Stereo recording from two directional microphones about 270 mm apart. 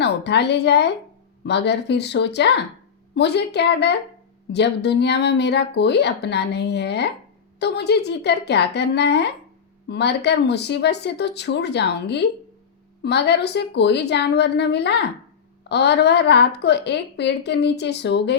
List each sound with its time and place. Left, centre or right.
0.0 s a woman's voice: left